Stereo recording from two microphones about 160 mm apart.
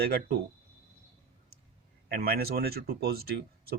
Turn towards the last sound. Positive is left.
turn(degrees=-75)  # may be behind; listen again after turning